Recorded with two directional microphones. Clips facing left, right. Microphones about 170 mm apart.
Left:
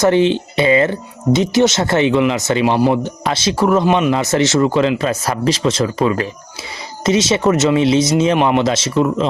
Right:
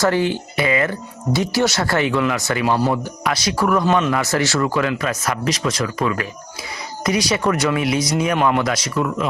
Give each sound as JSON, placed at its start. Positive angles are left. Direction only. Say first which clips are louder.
{"t": 0.0, "sound": "speech", "louder": "left 5 dB", "side_deg": 20}